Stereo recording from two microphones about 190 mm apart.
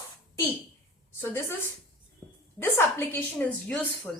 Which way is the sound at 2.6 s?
10° left (ahead or behind).